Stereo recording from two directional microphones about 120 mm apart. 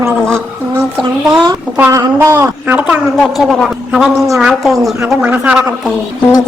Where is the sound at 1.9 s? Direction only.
25° right (ahead or behind).